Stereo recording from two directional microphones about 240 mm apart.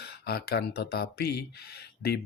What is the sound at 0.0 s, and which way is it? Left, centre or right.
Speech, left.